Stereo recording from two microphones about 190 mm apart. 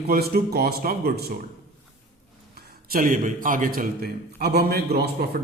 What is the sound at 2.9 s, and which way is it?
A man's voice, 45° right (ahead or behind).